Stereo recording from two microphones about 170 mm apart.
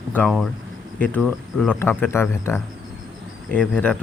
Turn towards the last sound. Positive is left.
turn(degrees=5)  # may be behind; listen again after turning